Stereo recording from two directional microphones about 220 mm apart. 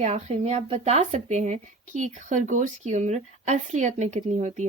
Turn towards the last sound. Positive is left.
turn(degrees=-30)  # may be behind; listen again after turning